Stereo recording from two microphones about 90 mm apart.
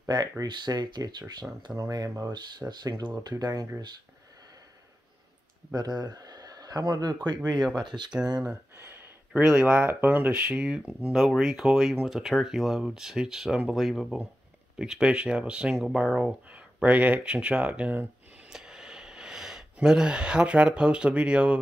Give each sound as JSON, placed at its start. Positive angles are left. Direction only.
{"t": 0.4, "sound": "speech", "side_deg": -50}
{"t": 2.0, "sound": "speech", "side_deg": -30}
{"t": 2.7, "sound": "speech", "side_deg": -50}
{"t": 5.8, "sound": "speech", "side_deg": -50}
{"t": 9.3, "sound": "speech", "side_deg": -10}
{"t": 18.5, "sound": "a sound", "side_deg": -5}